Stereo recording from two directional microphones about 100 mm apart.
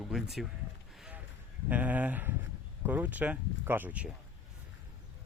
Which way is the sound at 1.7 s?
15° right (ahead or behind).